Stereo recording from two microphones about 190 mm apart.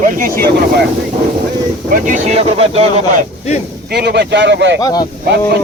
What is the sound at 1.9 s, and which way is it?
Speech, 40° right (ahead or behind).